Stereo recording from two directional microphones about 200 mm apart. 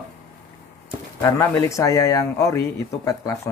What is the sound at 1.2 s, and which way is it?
Speech, 10° left (ahead or behind).